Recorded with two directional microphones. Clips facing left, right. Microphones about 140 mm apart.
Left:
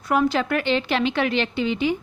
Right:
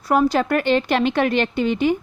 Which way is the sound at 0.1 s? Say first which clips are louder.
Right 3 dB; 40° right (ahead or behind).